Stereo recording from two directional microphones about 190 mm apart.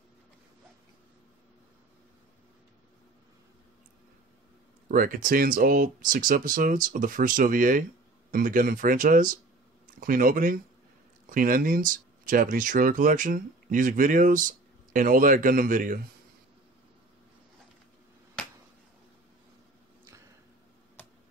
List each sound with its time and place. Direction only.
4.8 s speech: 45° right (ahead or behind)